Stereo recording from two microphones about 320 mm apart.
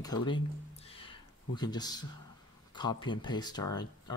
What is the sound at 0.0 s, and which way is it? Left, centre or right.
Speech, centre.